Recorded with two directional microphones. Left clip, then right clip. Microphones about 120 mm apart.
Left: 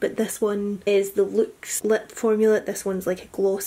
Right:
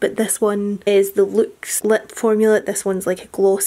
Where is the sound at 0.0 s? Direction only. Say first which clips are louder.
Right 6 dB; 40° right (ahead or behind).